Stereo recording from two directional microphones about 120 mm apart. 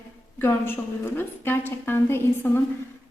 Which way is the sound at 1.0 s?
20° left (ahead or behind).